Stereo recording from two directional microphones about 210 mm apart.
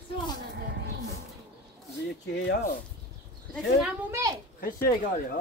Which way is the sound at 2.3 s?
55° left (ahead or behind).